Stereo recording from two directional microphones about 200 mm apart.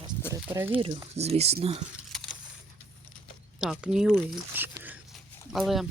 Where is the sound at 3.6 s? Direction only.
5° right (ahead or behind).